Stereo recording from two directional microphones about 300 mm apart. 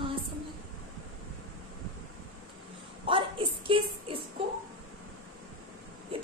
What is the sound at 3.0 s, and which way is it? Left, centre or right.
Speech, centre.